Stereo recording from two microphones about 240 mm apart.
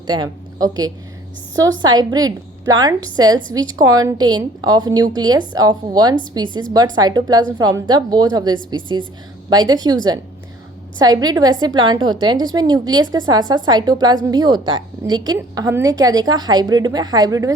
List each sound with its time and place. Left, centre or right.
0.1 s a woman's voice: centre